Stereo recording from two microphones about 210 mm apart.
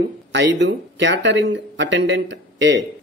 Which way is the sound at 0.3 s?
55° right (ahead or behind).